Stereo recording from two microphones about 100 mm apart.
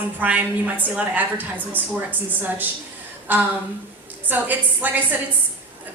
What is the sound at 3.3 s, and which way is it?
A woman's voice, 20° right (ahead or behind).